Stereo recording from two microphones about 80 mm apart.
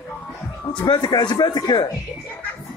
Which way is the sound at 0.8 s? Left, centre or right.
Left.